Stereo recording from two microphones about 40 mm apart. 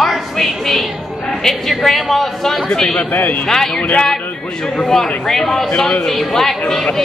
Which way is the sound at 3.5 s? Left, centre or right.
Centre.